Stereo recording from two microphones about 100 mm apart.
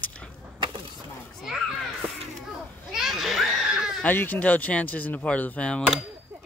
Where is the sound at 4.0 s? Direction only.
20° left (ahead or behind).